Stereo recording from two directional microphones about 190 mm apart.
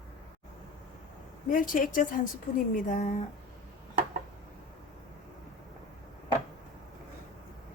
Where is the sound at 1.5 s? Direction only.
45° left (ahead or behind).